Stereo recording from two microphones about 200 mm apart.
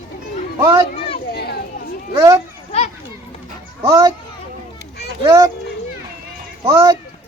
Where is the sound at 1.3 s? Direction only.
55° left (ahead or behind).